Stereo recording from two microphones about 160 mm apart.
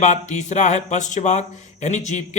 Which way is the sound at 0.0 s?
50° left (ahead or behind).